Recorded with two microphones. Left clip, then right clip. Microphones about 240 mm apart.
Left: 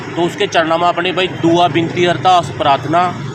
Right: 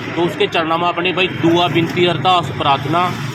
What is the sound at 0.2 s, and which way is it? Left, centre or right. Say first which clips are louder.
Speech: left 3 dB; centre.